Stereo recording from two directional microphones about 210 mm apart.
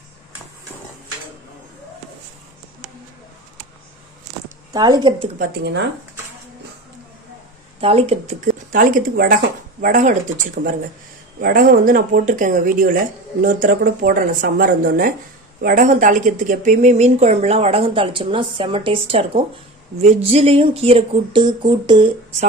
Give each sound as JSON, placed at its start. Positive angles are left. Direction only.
{"t": 4.7, "sound": "speech", "side_deg": -20}
{"t": 5.4, "sound": "speech", "side_deg": -50}
{"t": 7.8, "sound": "a woman's voice", "side_deg": -30}